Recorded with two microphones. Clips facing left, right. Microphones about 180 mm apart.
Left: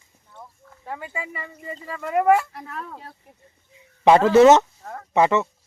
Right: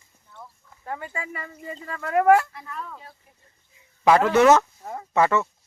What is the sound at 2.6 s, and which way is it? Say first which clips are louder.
Speech: left 1 dB; 65° left (ahead or behind).